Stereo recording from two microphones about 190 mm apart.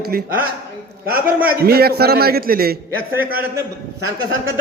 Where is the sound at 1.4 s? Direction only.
50° right (ahead or behind).